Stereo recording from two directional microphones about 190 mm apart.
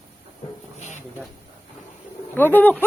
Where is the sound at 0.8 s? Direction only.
40° left (ahead or behind).